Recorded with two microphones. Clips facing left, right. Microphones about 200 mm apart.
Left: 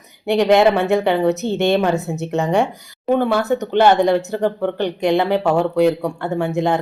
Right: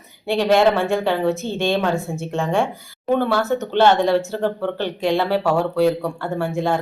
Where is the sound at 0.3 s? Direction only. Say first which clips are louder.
Left 3 dB; 20° left (ahead or behind).